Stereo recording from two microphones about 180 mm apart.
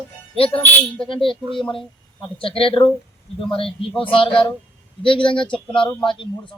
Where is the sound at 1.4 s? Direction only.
Centre (ahead or behind).